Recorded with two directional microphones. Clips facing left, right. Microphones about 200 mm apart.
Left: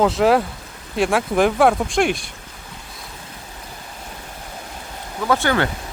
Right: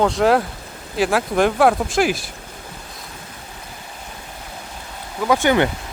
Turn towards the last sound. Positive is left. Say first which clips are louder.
# right 3 dB
turn(degrees=-15)  # may be behind; listen again after turning